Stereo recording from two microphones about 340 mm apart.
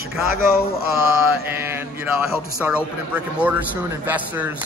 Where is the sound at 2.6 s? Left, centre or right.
Centre.